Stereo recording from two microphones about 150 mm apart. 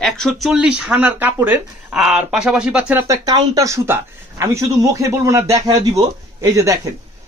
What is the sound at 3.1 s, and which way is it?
Speech, 25° right (ahead or behind).